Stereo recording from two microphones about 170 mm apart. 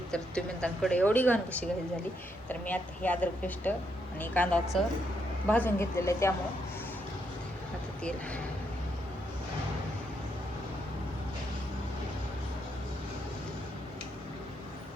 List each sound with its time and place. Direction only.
0.1 s speech: 5° left (ahead or behind)